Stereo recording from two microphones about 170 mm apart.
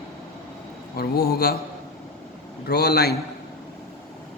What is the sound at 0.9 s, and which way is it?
Speech, 65° left (ahead or behind).